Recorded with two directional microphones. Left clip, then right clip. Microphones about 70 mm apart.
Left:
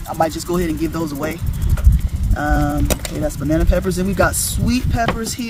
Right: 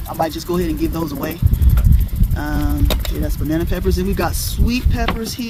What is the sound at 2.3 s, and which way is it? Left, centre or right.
Speech, left.